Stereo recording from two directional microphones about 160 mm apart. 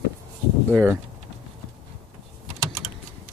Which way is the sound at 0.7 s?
15° right (ahead or behind).